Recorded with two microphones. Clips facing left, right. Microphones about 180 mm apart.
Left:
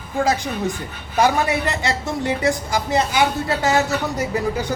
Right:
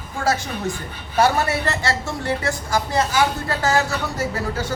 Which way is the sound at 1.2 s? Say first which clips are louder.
Left 1 dB; 15° left (ahead or behind).